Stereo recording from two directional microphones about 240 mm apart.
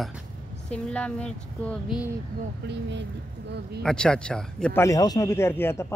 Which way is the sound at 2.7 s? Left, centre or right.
Right.